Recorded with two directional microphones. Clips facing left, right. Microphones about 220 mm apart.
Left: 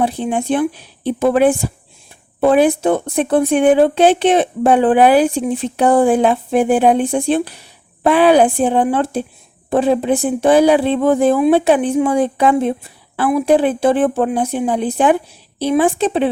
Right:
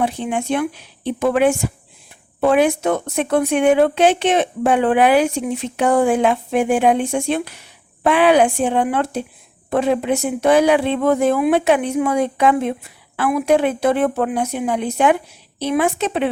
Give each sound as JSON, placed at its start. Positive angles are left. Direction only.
{"t": 0.0, "sound": "speech", "side_deg": 35}